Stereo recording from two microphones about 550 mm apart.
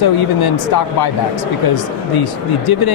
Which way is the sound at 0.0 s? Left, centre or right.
Left.